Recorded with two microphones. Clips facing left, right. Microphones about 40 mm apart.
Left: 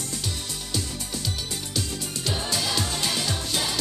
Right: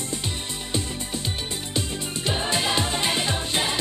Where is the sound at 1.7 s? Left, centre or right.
Right.